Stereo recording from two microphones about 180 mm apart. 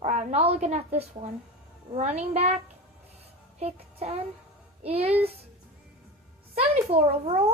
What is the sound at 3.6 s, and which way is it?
Child singing, 35° right (ahead or behind).